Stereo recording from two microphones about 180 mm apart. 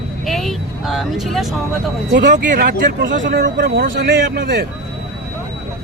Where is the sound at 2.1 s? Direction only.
65° right (ahead or behind).